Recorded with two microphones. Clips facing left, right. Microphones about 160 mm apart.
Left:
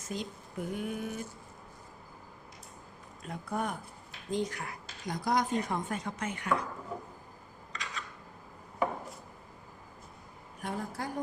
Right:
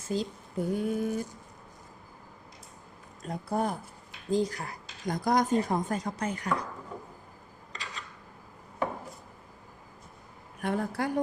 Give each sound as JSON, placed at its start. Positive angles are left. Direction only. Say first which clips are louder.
{"t": 0.0, "sound": "speech", "louder": "right 6 dB", "side_deg": -30}
{"t": 3.2, "sound": "speech", "louder": "right 5 dB", "side_deg": -35}
{"t": 7.7, "sound": "rub", "louder": "left 1 dB", "side_deg": -35}
{"t": 10.6, "sound": "a woman's voice", "louder": "right 7 dB", "side_deg": -65}